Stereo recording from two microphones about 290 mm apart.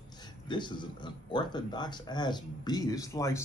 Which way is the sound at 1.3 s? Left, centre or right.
Centre.